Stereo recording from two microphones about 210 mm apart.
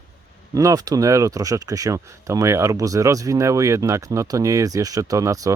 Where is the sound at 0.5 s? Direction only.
15° right (ahead or behind).